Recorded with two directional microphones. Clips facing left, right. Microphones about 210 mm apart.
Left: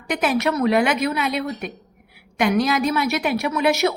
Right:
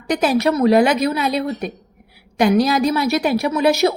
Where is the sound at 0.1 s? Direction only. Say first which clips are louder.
Right 4 dB; 35° right (ahead or behind).